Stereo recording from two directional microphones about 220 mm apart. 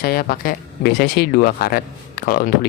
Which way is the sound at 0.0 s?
45° left (ahead or behind).